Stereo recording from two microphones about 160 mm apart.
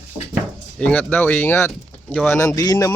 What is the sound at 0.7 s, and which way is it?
Speech, 10° left (ahead or behind).